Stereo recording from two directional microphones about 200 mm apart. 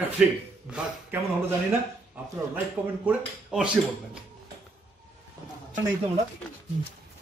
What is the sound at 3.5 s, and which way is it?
Speech, 5° right (ahead or behind).